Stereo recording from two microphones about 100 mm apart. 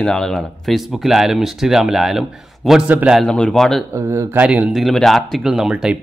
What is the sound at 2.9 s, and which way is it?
Speech, 15° right (ahead or behind).